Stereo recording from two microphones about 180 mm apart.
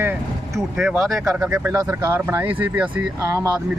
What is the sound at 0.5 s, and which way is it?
Speech, centre (ahead or behind).